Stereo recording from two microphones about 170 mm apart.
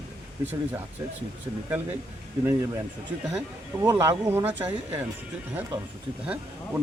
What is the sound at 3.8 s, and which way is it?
Speech, 15° right (ahead or behind).